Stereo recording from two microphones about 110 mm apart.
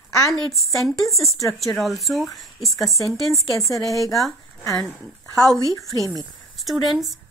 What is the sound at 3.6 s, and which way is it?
Speech, 30° left (ahead or behind).